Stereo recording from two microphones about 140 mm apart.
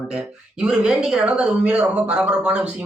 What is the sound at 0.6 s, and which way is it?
Speech, 5° right (ahead or behind).